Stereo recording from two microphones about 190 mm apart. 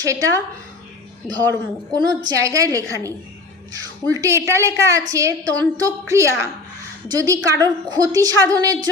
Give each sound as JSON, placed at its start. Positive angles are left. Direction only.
{"t": 0.0, "sound": "a woman's voice", "side_deg": -15}
{"t": 1.5, "sound": "a woman's voice", "side_deg": -20}